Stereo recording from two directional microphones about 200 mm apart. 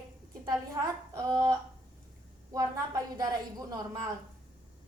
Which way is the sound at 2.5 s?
20° right (ahead or behind).